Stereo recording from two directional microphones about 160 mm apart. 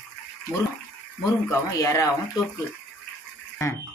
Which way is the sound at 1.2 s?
20° left (ahead or behind).